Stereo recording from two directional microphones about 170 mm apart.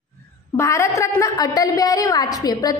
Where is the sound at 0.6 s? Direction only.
15° left (ahead or behind).